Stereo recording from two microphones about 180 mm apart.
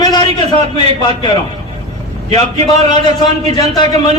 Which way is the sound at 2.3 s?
20° left (ahead or behind).